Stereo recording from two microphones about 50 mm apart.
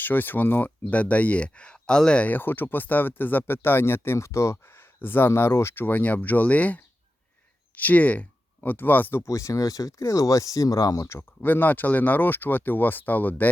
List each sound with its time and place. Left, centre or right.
0.0 s speech: left; by 2.2 s centre
2.2 s speech: left
4.7 s speech: left
5.8 s speech: left
9.2 s speech: left
11.2 s speech: left